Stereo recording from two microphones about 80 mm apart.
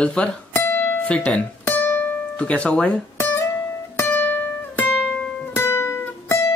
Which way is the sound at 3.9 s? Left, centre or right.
Left.